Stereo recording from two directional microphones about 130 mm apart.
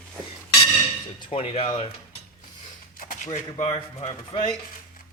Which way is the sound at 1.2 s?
45° left (ahead or behind).